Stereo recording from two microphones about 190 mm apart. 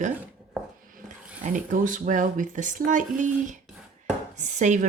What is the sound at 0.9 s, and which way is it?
Dog, 45° right (ahead or behind).